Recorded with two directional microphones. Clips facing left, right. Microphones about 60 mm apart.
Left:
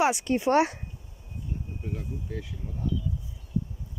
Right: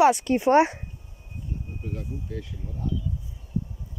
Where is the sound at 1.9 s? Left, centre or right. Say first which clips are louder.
Right 1 dB; centre.